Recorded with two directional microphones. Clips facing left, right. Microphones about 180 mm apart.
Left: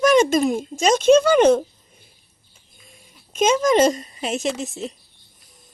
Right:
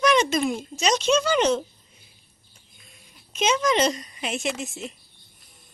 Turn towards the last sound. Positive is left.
turn(degrees=35)  # may be behind; listen again after turning